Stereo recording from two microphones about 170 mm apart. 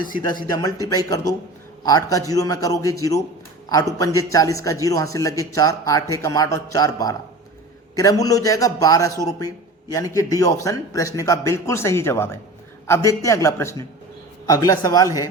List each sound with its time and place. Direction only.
0.5 s a man's voice: 20° left (ahead or behind)